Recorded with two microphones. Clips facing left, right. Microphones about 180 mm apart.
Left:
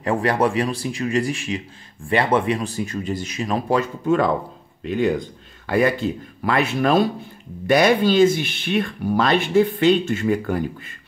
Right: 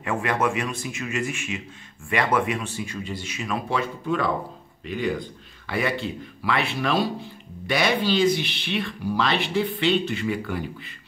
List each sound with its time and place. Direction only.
0.0 s speech: 35° left (ahead or behind)